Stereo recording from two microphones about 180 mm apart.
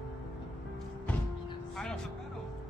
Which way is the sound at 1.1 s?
10° left (ahead or behind).